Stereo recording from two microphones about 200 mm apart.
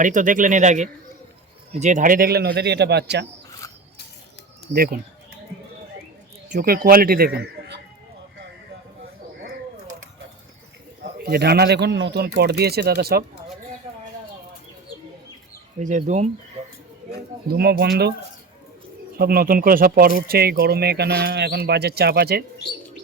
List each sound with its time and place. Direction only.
0.0 s speech: 40° right (ahead or behind); by 3.2 s 55° right (ahead or behind)
4.7 s speech: 50° right (ahead or behind)
6.5 s a man's voice: 45° right (ahead or behind)
11.3 s speech: 55° right (ahead or behind)
15.8 s speech: 40° right (ahead or behind)
17.1 s speech: 55° right (ahead or behind)
19.1 s speech: 50° right (ahead or behind)